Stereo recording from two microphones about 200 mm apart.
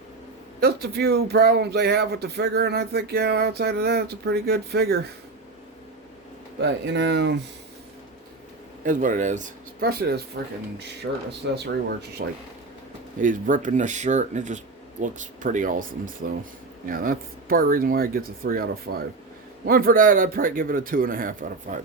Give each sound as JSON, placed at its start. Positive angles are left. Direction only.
{"t": 0.6, "sound": "speech", "side_deg": -50}
{"t": 6.6, "sound": "speech", "side_deg": -60}
{"t": 8.8, "sound": "speech", "side_deg": -40}
{"t": 10.4, "sound": "speech", "side_deg": -65}
{"t": 13.1, "sound": "speech", "side_deg": -40}